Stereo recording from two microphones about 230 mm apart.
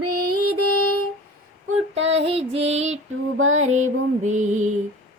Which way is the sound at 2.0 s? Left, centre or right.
Right.